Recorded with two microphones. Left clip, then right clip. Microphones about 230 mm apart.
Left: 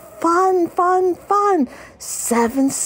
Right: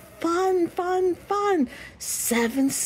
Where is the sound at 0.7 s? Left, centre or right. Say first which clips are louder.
Left 8 dB; centre.